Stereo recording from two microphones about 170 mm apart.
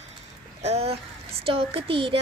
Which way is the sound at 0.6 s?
35° right (ahead or behind).